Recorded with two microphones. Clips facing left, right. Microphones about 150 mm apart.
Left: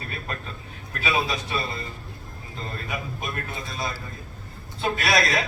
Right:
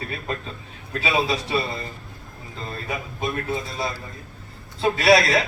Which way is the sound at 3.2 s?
25° right (ahead or behind).